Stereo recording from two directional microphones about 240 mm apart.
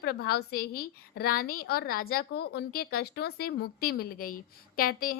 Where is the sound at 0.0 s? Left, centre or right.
Left.